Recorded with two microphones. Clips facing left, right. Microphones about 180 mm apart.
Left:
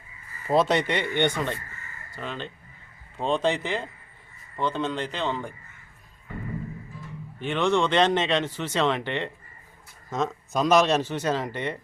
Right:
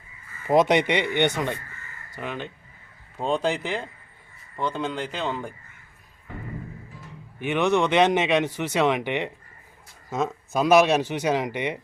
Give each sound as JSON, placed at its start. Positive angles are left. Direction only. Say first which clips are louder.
{"t": 0.4, "sound": "speech", "louder": "right 3 dB", "side_deg": -15}
{"t": 3.2, "sound": "a man's voice", "louder": "even", "side_deg": 0}
{"t": 7.3, "sound": "speech", "louder": "right 2 dB", "side_deg": -10}